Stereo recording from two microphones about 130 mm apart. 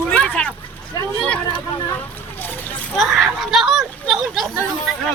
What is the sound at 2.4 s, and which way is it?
Vehicle, 15° left (ahead or behind).